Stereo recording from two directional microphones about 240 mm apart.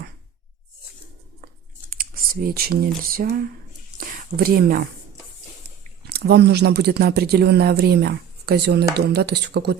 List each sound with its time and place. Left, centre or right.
2.5 s speech: right
6.1 s speech: right